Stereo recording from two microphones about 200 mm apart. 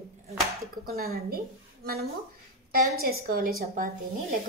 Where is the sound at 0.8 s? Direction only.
50° right (ahead or behind).